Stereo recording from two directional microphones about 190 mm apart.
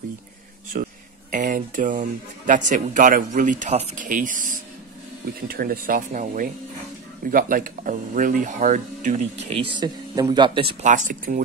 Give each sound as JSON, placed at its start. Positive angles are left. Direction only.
{"t": 0.7, "sound": "speech", "side_deg": -45}
{"t": 9.6, "sound": "speech", "side_deg": -25}
{"t": 10.9, "sound": "speech", "side_deg": -45}